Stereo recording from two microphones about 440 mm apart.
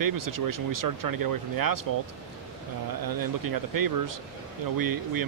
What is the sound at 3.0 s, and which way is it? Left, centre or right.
Speech, right.